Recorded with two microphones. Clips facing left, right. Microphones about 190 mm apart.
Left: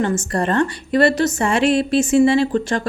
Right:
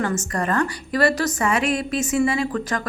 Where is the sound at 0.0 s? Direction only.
30° left (ahead or behind).